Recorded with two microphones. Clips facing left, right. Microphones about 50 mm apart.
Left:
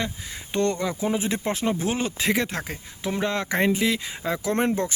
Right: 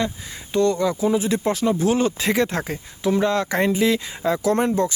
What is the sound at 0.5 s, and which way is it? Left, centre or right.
Speech, left.